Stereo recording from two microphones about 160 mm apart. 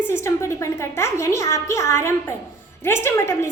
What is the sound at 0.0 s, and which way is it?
A woman's voice, 15° left (ahead or behind).